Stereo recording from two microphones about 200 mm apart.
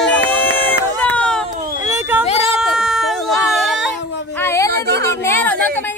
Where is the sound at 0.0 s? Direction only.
10° left (ahead or behind).